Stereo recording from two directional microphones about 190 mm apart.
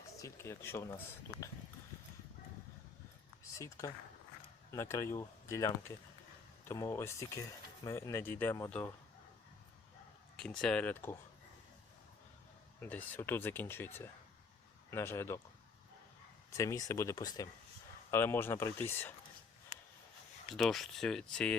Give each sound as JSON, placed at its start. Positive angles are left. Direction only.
{"t": 0.2, "sound": "speech", "side_deg": 15}
{"t": 3.6, "sound": "speech", "side_deg": 15}
{"t": 10.3, "sound": "speech", "side_deg": 5}
{"t": 12.8, "sound": "speech", "side_deg": 10}
{"t": 16.6, "sound": "speech", "side_deg": 15}
{"t": 20.6, "sound": "speech", "side_deg": 0}